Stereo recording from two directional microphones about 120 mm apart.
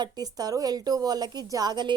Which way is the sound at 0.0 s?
35° right (ahead or behind).